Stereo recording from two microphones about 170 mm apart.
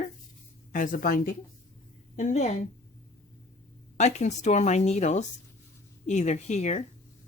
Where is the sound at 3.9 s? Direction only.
40° left (ahead or behind).